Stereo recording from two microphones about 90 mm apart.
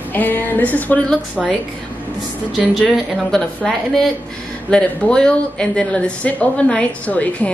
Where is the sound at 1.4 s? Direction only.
Centre (ahead or behind).